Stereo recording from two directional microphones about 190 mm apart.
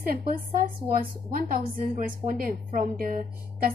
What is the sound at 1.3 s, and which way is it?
A woman's voice, 50° right (ahead or behind).